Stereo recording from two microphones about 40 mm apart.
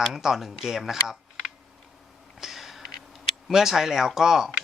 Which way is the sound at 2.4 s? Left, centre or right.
Centre.